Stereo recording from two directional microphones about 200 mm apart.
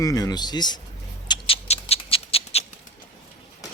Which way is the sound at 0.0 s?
20° left (ahead or behind).